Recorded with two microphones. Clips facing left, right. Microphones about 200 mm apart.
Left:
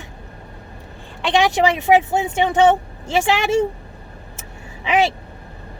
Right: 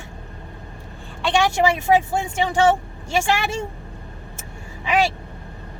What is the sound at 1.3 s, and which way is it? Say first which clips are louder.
Speech: left 2 dB; 20° left (ahead or behind).